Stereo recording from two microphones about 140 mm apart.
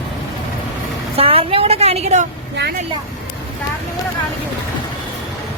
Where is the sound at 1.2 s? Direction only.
40° right (ahead or behind).